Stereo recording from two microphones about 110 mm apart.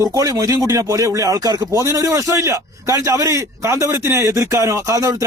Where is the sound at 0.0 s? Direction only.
30° right (ahead or behind).